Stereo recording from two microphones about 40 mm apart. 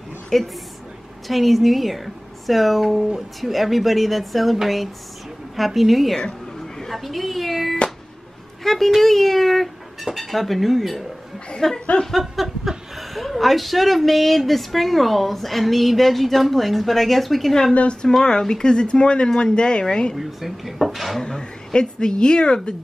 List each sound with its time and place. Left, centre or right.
0.3 s speech: centre
1.2 s speech: centre
5.6 s speech: centre
6.8 s a sound: centre
8.6 s speech: centre
11.6 s speech: centre
18.0 s speech: centre
20.2 s speech: centre
21.2 s speech: centre